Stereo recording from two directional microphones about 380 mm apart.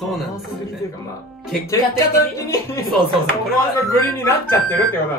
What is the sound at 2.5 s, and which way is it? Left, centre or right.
Speech, centre.